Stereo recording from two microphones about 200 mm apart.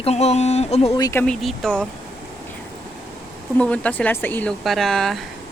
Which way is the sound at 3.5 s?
5° left (ahead or behind).